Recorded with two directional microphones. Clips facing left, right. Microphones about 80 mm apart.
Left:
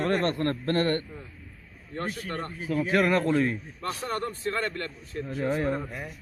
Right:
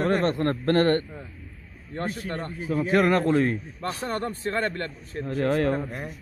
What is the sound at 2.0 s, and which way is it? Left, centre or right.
A man's voice, right.